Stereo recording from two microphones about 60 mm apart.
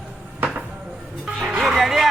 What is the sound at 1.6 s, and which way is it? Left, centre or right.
Music, centre.